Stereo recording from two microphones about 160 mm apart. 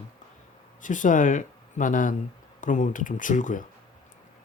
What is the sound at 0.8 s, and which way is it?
Speech, 55° left (ahead or behind).